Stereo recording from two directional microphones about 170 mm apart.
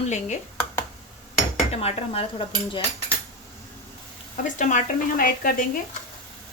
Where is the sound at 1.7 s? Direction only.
35° left (ahead or behind).